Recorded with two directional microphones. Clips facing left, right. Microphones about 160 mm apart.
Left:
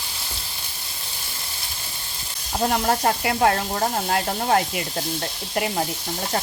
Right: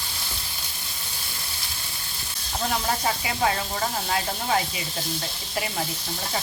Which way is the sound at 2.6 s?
55° left (ahead or behind).